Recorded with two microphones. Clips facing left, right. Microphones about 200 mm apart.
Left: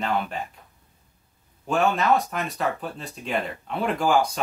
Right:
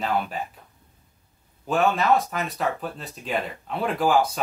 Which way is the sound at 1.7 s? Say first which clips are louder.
Right 1 dB; centre (ahead or behind).